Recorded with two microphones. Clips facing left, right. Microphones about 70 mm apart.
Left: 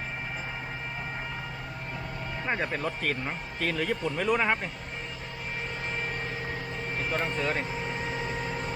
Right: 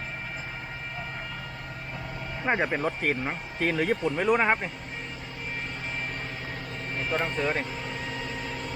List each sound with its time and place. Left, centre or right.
2.5 s speech: right; by 4.4 s centre
7.0 s speech: centre
7.7 s vehicle: centre
8.2 s vehicle: left